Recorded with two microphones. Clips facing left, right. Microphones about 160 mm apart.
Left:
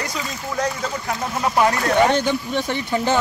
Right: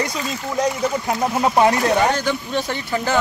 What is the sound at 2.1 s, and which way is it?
Speech, 25° left (ahead or behind).